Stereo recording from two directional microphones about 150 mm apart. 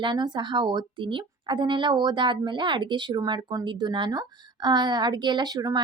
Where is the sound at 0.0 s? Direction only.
30° right (ahead or behind).